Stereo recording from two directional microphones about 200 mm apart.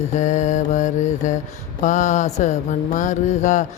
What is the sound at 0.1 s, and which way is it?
Mantra, 35° left (ahead or behind).